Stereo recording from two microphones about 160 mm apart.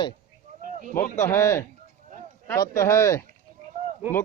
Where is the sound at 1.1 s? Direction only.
15° left (ahead or behind).